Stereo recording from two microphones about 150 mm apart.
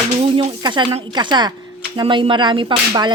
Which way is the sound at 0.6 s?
30° right (ahead or behind).